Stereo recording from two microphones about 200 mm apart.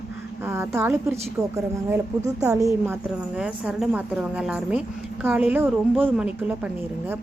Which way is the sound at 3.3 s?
5° right (ahead or behind).